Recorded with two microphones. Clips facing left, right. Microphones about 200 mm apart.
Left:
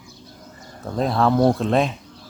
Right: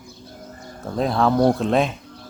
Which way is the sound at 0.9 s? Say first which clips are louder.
Even; centre (ahead or behind).